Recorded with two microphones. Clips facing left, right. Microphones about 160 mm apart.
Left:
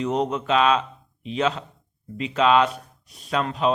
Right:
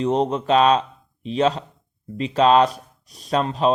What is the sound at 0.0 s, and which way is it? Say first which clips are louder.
Speech: right 3 dB; 30° right (ahead or behind).